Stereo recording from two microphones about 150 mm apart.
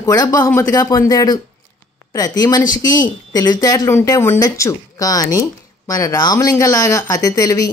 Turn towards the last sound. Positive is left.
turn(degrees=25)  # may be behind; listen again after turning